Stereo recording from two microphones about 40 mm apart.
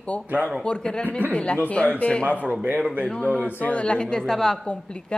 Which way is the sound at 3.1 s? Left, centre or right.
Left.